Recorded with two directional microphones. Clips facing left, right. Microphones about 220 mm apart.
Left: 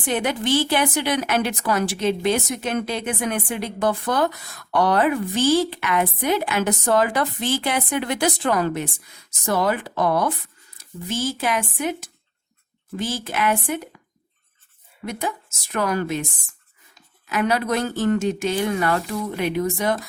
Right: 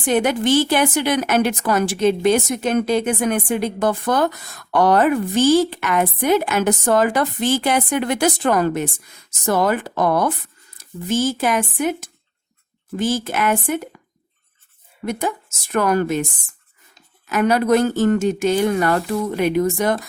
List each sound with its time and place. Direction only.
0.1 s a woman's voice: 45° right (ahead or behind)
13.0 s a woman's voice: 45° right (ahead or behind)
15.7 s a woman's voice: 50° right (ahead or behind)
17.2 s a woman's voice: 45° right (ahead or behind)